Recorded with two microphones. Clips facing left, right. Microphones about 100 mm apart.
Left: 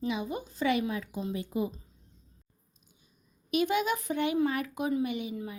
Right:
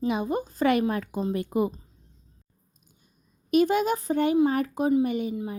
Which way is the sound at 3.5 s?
40° right (ahead or behind).